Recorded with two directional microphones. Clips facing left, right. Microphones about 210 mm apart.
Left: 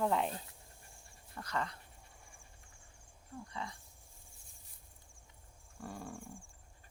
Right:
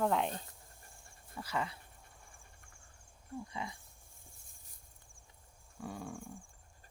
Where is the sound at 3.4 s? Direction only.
15° right (ahead or behind).